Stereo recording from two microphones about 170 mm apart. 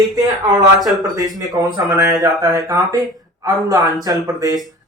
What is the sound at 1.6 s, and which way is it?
Speech, 20° right (ahead or behind).